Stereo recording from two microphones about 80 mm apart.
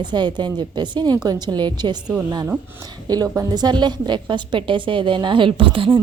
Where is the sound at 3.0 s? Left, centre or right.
Right.